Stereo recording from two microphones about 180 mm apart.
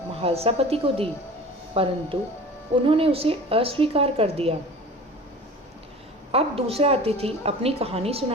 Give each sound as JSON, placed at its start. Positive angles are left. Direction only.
{"t": 0.2, "sound": "a woman's voice", "side_deg": -35}
{"t": 6.3, "sound": "a woman's voice", "side_deg": -35}